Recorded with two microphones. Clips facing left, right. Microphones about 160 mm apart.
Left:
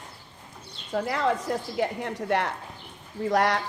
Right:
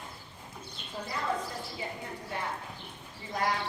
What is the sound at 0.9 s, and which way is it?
A woman's voice, 80° left.